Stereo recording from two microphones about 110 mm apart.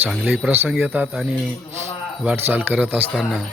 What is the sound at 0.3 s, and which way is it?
Speech, 15° right (ahead or behind).